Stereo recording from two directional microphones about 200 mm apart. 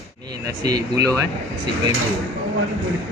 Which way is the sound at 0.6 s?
20° right (ahead or behind).